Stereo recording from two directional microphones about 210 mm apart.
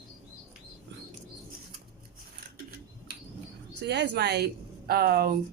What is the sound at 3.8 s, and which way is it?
Speech, 55° right (ahead or behind).